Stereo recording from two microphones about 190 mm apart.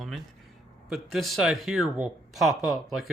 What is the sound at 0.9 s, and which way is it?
Speech, centre (ahead or behind).